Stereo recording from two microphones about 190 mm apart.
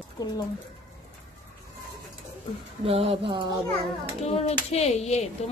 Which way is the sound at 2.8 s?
30° right (ahead or behind).